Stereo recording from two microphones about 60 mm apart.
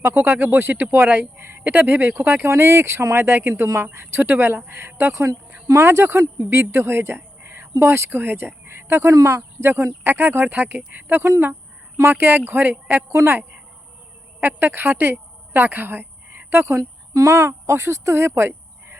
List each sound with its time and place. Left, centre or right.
0.0 s speech: right
0.3 s speech: right
9.1 s speech: right
9.6 s speech: right
13.1 s speech: right
14.4 s speech: right
16.6 s speech: right